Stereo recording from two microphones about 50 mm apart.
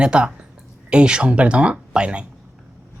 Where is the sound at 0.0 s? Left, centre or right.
Right.